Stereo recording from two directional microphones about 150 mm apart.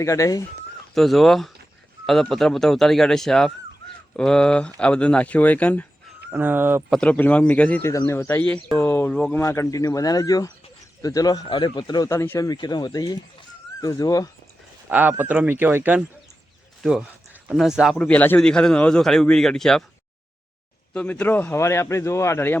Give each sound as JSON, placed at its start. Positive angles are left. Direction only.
{"t": 0.0, "sound": "speech", "side_deg": 20}
{"t": 0.9, "sound": "a man's voice", "side_deg": 0}
{"t": 6.3, "sound": "speech", "side_deg": -15}
{"t": 6.9, "sound": "speech", "side_deg": 10}
{"t": 12.5, "sound": "speech", "side_deg": 25}
{"t": 14.8, "sound": "a man's voice", "side_deg": -10}
{"t": 17.9, "sound": "a man's voice", "side_deg": 10}
{"t": 20.9, "sound": "speech", "side_deg": 10}